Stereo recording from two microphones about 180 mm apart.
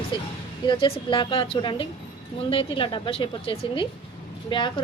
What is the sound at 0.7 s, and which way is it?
A woman's voice, 30° left (ahead or behind).